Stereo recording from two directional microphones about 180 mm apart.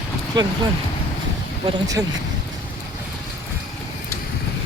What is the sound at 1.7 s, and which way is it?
Speech, 20° right (ahead or behind).